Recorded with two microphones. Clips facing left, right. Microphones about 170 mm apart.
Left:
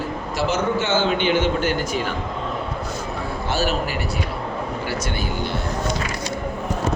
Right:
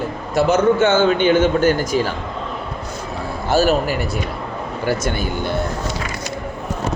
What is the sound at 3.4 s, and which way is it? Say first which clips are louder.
A man's voice: right 8 dB; 40° right (ahead or behind).